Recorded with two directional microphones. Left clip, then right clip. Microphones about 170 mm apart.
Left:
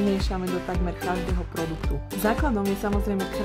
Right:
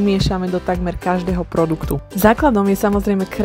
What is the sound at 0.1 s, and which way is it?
Speech, 40° right (ahead or behind).